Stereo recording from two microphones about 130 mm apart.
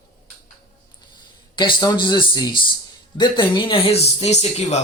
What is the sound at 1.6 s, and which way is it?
Speech, 35° left (ahead or behind).